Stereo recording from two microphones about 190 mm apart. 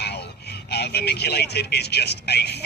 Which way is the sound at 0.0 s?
60° left (ahead or behind).